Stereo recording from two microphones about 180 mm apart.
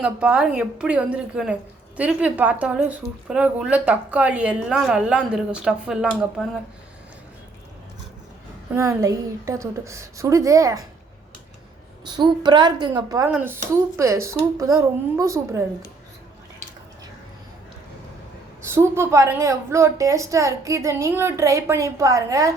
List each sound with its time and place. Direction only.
0.0 s a woman's voice: 5° right (ahead or behind)
8.7 s a woman's voice: 15° right (ahead or behind)
12.0 s a woman's voice: 25° right (ahead or behind)
18.6 s a woman's voice: 15° right (ahead or behind)